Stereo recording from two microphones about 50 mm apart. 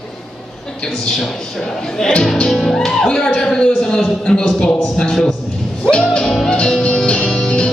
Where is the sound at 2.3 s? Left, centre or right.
Centre.